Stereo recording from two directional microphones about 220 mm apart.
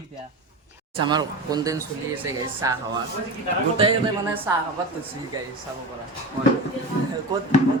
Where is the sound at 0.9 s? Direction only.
20° right (ahead or behind).